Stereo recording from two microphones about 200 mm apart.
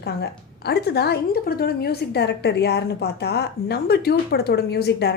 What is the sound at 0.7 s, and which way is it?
A woman's voice, 55° left (ahead or behind).